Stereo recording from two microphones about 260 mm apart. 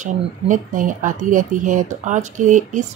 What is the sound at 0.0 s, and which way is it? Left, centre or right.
Speech, right.